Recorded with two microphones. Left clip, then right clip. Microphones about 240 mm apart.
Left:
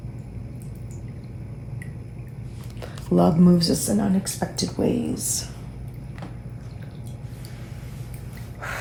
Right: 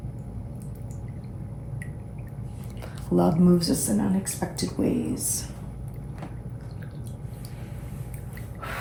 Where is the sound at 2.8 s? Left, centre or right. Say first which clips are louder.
Left 3 dB; left.